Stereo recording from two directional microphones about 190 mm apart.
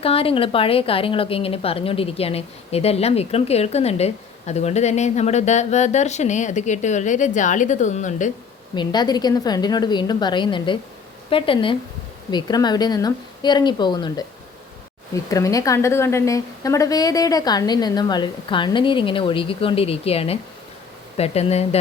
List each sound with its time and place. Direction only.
0.0 s a woman's voice: 30° left (ahead or behind)
8.7 s a woman's voice: 25° left (ahead or behind)